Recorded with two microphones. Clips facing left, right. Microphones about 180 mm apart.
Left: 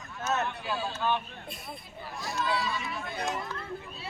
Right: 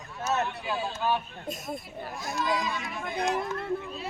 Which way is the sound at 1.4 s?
45° right (ahead or behind).